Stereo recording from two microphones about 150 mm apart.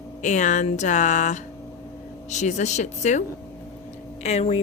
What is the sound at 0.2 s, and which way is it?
Speech, 55° left (ahead or behind).